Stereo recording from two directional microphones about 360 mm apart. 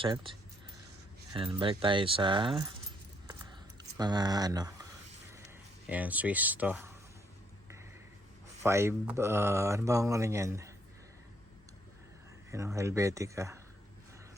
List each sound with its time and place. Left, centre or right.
0.0 s speech: centre
1.5 s speech: centre
3.2 s a sound: centre
5.9 s speech: centre
8.6 s speech: centre
12.5 s speech: centre